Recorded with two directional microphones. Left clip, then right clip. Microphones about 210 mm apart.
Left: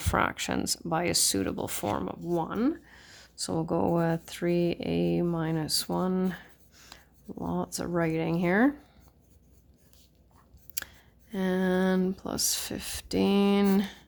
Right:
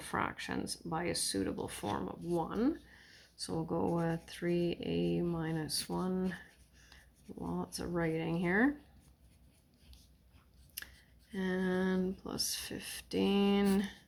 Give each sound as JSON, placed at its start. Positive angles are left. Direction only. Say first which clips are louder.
{"t": 0.0, "sound": "speech", "louder": "left 9 dB", "side_deg": 50}
{"t": 11.3, "sound": "speech", "louder": "left 7 dB", "side_deg": 45}